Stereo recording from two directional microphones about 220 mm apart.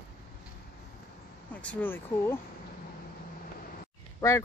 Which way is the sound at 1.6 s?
5° left (ahead or behind).